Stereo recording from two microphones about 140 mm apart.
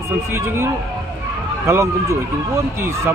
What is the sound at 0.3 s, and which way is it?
Speech, 20° right (ahead or behind).